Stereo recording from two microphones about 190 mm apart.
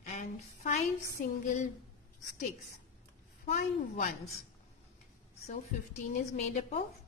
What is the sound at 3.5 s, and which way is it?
Speech, 45° left (ahead or behind).